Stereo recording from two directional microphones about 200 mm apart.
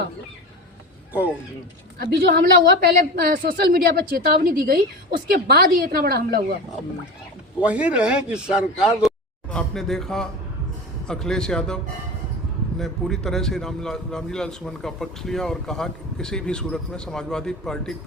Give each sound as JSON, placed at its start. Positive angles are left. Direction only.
{"t": 2.0, "sound": "a woman's voice", "side_deg": -50}
{"t": 7.6, "sound": "a man's voice", "side_deg": -5}
{"t": 12.8, "sound": "a man's voice", "side_deg": 0}